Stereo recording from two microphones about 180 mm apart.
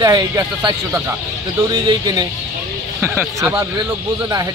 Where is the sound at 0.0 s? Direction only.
20° right (ahead or behind).